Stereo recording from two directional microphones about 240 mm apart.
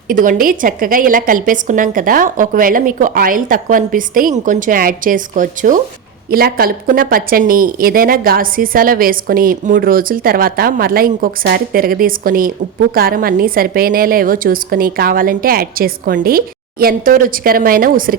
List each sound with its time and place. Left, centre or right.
0.1 s a woman's voice: right